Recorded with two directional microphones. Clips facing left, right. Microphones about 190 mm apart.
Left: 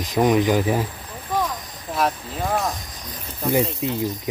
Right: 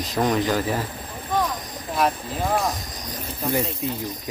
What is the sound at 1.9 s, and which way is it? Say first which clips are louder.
Speech: even; centre (ahead or behind).